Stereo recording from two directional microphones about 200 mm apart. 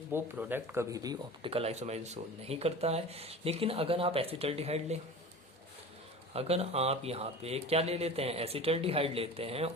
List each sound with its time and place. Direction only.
0.1 s speech: 10° right (ahead or behind); by 4.9 s 30° right (ahead or behind)
6.3 s speech: 30° right (ahead or behind)